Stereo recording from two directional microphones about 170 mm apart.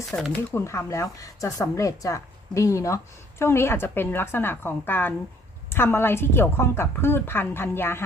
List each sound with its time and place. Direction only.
0.1 s speech: 15° left (ahead or behind)